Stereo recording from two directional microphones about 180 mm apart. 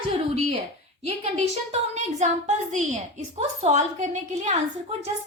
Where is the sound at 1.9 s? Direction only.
40° right (ahead or behind).